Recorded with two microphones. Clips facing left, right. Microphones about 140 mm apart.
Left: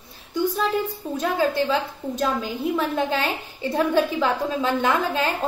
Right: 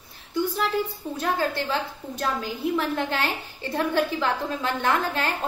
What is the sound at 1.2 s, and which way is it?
A woman's voice, 20° left (ahead or behind).